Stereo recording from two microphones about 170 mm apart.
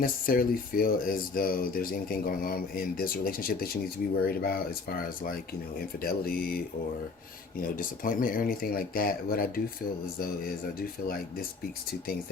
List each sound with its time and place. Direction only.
0.0 s speech: 55° left (ahead or behind)
7.6 s speech: 55° left (ahead or behind)